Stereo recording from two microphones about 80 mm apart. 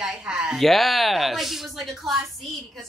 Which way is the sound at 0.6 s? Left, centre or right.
Centre.